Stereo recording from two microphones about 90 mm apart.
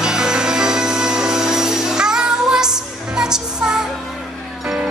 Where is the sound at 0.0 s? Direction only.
5° right (ahead or behind).